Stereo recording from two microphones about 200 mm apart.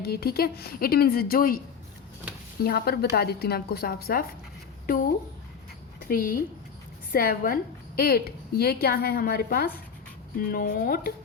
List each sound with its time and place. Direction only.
0.0 s a woman's voice: 50° left (ahead or behind)
2.6 s a woman's voice: 50° left (ahead or behind)
6.0 s a woman's voice: 45° left (ahead or behind)